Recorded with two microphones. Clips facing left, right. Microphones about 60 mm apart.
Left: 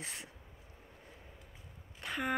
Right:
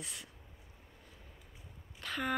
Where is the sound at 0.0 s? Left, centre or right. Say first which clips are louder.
Left 2 dB; left.